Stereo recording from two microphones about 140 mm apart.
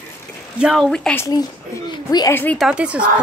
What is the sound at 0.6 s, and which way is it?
Speech, 5° right (ahead or behind).